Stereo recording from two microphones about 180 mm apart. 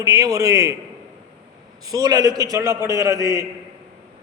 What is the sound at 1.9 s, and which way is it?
Speech, 20° right (ahead or behind).